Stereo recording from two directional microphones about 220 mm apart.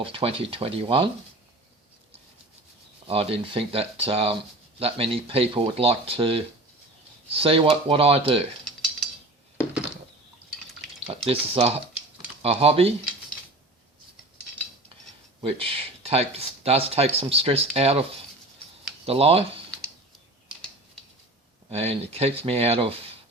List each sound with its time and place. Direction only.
0.0 s speech: 25° right (ahead or behind)
3.1 s speech: 25° right (ahead or behind)
11.1 s speech: 25° right (ahead or behind)
15.4 s speech: 25° right (ahead or behind)
19.0 s speech: 25° right (ahead or behind)
21.7 s speech: 30° right (ahead or behind)